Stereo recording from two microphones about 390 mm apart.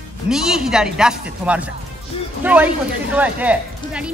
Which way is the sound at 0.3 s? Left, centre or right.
Centre.